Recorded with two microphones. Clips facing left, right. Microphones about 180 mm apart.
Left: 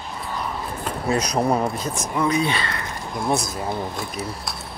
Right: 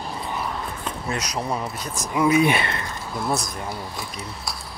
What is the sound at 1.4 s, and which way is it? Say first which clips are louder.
Speech: left 7 dB; 50° left (ahead or behind).